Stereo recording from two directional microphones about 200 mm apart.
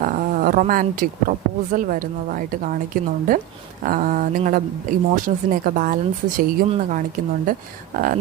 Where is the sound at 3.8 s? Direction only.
45° right (ahead or behind).